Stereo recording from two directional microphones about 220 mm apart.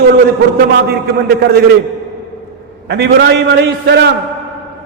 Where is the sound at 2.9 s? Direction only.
50° right (ahead or behind).